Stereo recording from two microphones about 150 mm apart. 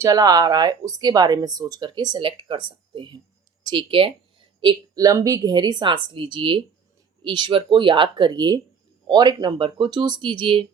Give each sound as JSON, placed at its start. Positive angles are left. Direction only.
{"t": 0.0, "sound": "a woman's voice", "side_deg": -25}